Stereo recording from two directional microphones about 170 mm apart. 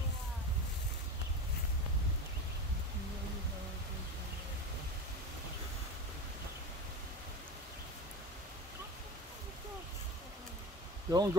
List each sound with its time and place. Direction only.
11.1 s speech: 20° right (ahead or behind)